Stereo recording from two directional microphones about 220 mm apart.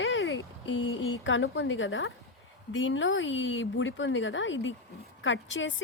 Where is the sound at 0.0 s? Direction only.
60° left (ahead or behind).